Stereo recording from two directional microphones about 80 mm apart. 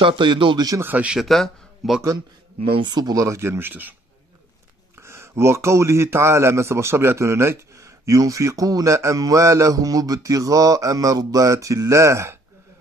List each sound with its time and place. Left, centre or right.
0.0 s a man's voice: right
0.7 s speech: right
1.1 s speech: centre
2.1 s speech: right
4.9 s a man's voice: right